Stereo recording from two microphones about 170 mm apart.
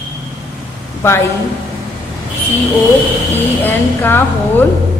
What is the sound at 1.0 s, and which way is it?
Speech, 15° left (ahead or behind).